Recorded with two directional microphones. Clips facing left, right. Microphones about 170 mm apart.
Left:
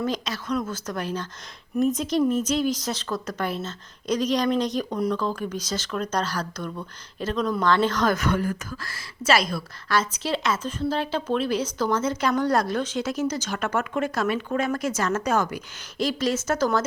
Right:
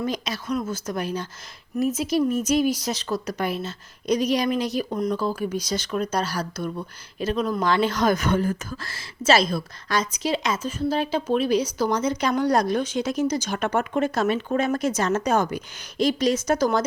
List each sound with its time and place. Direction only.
0.0 s a woman's voice: 10° right (ahead or behind)
8.3 s a woman's voice: 25° right (ahead or behind)